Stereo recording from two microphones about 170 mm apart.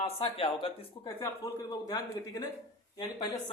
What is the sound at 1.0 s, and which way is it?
Speech, 20° left (ahead or behind).